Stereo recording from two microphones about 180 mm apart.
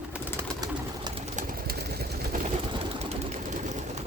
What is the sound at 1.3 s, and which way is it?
Pigeon, 50° right (ahead or behind).